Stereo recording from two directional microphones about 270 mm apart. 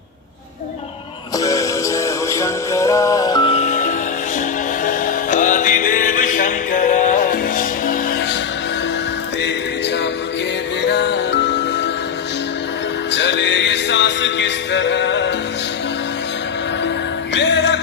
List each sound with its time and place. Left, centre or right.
1.4 s music: centre; by 8.4 s left
9.4 s music: left
13.1 s music: left
17.3 s music: left